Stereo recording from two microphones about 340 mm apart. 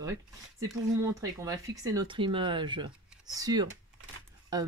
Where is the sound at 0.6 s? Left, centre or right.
Centre.